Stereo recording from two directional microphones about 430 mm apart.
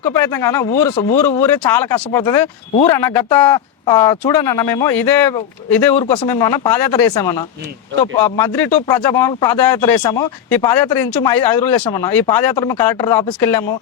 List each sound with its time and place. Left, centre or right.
0.0 s speech: centre
1.5 s speech: left
2.1 s speech: centre
11.3 s speech: left
11.9 s speech: centre